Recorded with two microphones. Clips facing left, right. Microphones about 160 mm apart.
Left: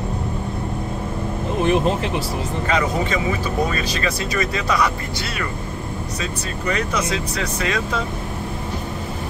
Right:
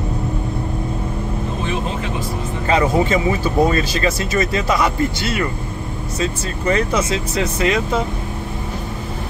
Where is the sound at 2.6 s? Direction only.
30° right (ahead or behind).